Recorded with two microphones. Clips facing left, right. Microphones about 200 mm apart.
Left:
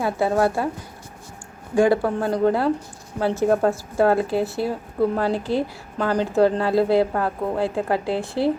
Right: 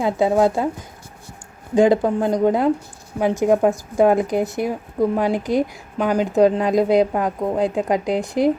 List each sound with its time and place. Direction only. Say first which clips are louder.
0.0 s speech: right 3 dB; 15° right (ahead or behind)
1.7 s speech: right 3 dB; 20° right (ahead or behind)